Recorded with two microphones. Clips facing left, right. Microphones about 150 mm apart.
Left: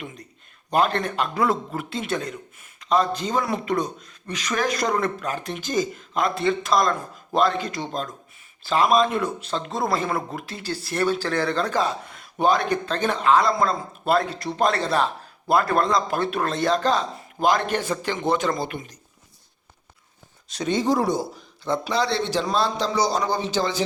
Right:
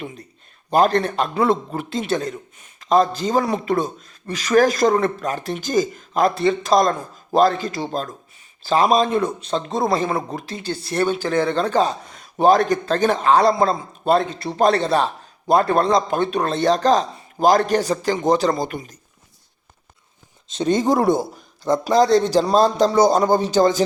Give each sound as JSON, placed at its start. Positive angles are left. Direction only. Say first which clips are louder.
{"t": 0.7, "sound": "a man's voice", "louder": "right 5 dB", "side_deg": -40}
{"t": 6.4, "sound": "a man's voice", "louder": "right 3 dB", "side_deg": -30}
{"t": 9.1, "sound": "a man's voice", "louder": "right 5 dB", "side_deg": -25}
{"t": 16.7, "sound": "a man's voice", "louder": "right 5 dB", "side_deg": -40}
{"t": 20.7, "sound": "speech", "louder": "right 4 dB", "side_deg": -45}